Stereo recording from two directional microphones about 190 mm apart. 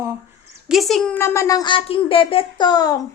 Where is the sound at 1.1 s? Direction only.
15° left (ahead or behind).